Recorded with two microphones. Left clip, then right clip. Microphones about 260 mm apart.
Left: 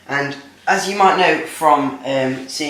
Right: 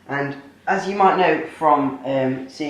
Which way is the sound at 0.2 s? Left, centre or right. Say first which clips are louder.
Left 4 dB; centre.